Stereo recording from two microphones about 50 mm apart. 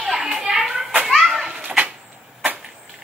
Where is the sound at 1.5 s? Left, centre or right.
Right.